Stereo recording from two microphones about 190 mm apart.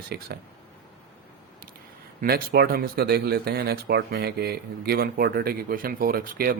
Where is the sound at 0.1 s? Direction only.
55° right (ahead or behind).